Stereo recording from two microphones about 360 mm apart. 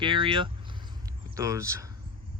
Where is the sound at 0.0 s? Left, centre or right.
Centre.